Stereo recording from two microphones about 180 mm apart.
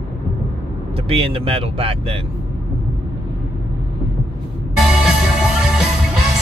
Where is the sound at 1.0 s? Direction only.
30° right (ahead or behind).